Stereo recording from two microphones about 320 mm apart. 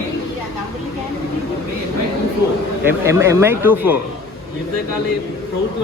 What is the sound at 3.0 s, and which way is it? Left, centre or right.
Speech, centre.